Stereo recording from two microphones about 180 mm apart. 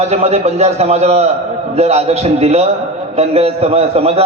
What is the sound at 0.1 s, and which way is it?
A man's voice, 35° right (ahead or behind).